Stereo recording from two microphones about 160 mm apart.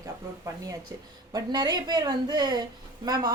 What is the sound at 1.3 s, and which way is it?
A woman's voice, 25° right (ahead or behind).